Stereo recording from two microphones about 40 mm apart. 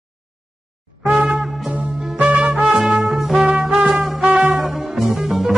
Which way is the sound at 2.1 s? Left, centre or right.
Right.